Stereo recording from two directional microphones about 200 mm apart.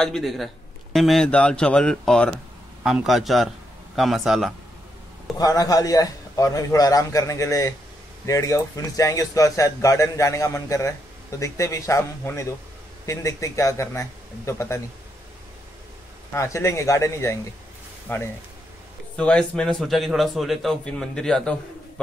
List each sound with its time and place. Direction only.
0.0 s a man's voice: centre (ahead or behind)
5.4 s speech: 15° left (ahead or behind)
16.3 s a man's voice: 15° left (ahead or behind)